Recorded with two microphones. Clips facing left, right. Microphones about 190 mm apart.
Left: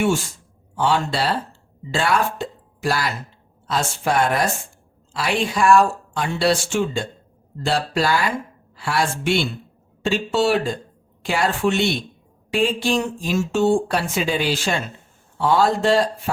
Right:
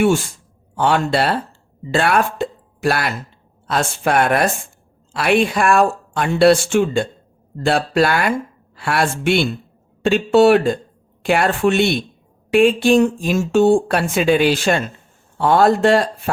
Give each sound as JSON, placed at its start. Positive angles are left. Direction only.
{"t": 0.8, "sound": "speech", "side_deg": -60}